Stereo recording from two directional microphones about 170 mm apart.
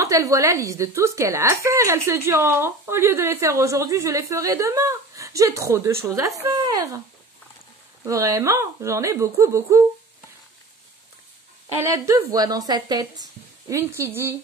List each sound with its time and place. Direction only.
0.0 s speech: 20° right (ahead or behind)
8.0 s speech: 20° right (ahead or behind)
11.8 s a woman's voice: 20° right (ahead or behind)